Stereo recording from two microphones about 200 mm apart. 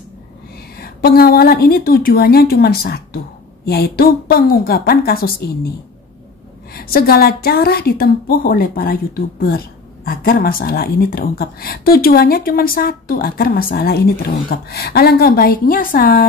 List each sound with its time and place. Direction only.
0.7 s a woman's voice: 50° left (ahead or behind)
6.7 s a woman's voice: 50° left (ahead or behind)